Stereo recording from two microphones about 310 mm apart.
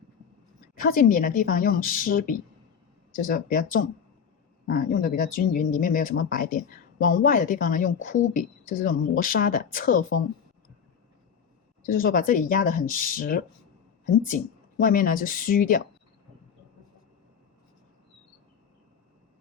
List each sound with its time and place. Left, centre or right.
0.8 s speech: left
11.9 s speech: left